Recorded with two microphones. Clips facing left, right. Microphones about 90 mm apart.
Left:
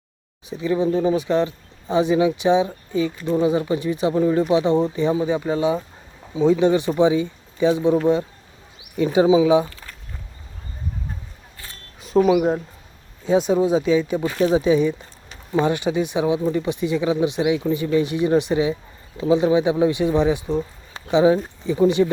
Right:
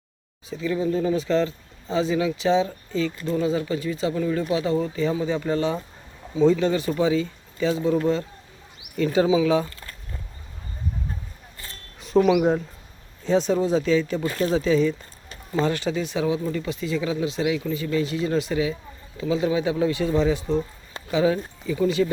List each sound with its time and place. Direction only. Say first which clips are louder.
0.5 s speech: left 4 dB; 20° left (ahead or behind)
9.0 s speech: left 4 dB; 15° left (ahead or behind)
11.9 s speech: left 2 dB; centre (ahead or behind); by 22.1 s 20° left (ahead or behind)